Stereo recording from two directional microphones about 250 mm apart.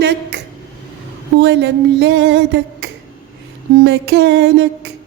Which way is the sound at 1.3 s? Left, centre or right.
Right.